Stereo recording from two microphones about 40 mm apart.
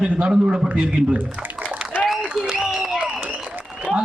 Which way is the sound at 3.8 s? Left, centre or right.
Right.